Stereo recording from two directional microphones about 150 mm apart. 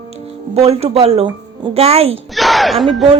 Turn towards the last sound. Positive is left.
turn(degrees=0)  # may be behind; listen again after turning